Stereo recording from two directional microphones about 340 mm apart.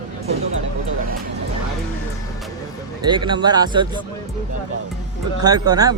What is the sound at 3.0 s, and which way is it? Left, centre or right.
Speech, centre.